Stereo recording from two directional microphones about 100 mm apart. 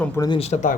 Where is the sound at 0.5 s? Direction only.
90° left.